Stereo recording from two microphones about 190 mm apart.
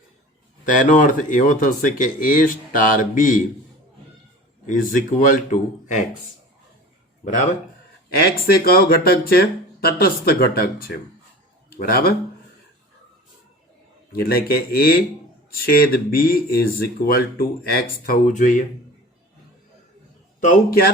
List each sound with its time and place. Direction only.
0.6 s speech: 45° left (ahead or behind)
4.6 s speech: 45° left (ahead or behind)
8.4 s speech: 55° left (ahead or behind)
14.1 s speech: 50° left (ahead or behind)
20.4 s speech: 45° left (ahead or behind)